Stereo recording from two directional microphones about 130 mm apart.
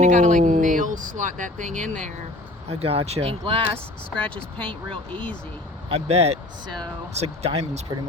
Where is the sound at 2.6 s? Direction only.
50° right (ahead or behind).